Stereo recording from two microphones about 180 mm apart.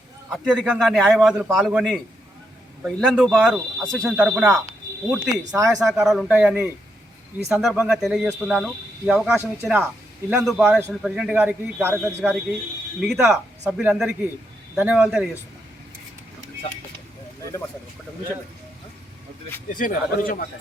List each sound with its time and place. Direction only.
0.3 s a man's voice: 5° right (ahead or behind)
19.7 s speech: 50° left (ahead or behind)